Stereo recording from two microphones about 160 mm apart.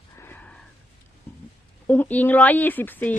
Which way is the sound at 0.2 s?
10° left (ahead or behind).